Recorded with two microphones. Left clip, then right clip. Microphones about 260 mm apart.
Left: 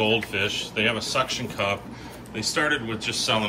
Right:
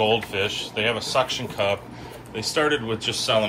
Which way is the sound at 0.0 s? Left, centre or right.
Centre.